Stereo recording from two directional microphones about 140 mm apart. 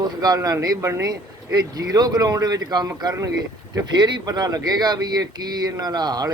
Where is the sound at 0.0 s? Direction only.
30° right (ahead or behind).